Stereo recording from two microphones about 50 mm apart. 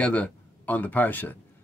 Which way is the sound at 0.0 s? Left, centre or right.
Left.